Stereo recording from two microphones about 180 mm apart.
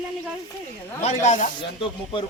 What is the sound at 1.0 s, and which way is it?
Speech, 40° left (ahead or behind).